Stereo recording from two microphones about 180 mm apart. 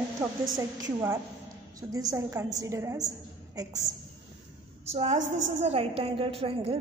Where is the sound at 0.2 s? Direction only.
20° right (ahead or behind).